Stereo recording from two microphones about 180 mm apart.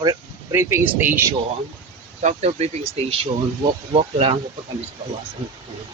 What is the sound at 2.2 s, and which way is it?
Speech, 35° right (ahead or behind).